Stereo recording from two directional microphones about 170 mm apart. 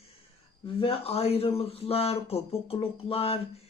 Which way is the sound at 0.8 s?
35° left (ahead or behind).